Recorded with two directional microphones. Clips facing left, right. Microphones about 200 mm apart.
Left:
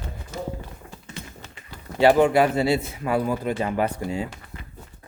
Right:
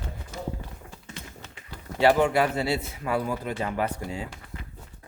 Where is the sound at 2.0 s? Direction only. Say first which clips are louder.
Left 4 dB; 15° left (ahead or behind).